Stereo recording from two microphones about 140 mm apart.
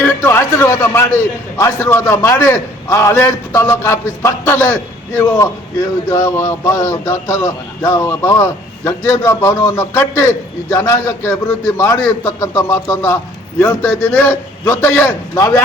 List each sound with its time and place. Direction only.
0.0 s a man's voice: 15° left (ahead or behind)